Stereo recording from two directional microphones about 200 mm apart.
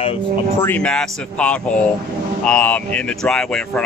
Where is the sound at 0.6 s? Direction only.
10° left (ahead or behind).